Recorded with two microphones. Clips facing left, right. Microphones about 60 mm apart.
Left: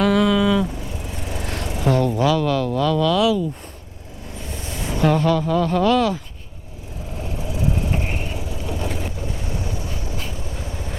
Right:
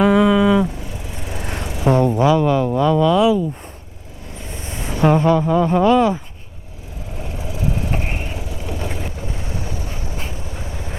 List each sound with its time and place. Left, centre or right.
0.0 s vehicle: centre
1.8 s speech: centre
4.7 s a sound: centre
4.9 s speech: right
7.3 s vehicle: right